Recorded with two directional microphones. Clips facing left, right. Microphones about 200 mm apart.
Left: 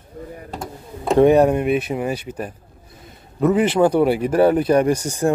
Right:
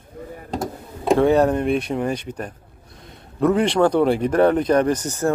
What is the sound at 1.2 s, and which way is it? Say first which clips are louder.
A man's voice: left 5 dB; 15° left (ahead or behind).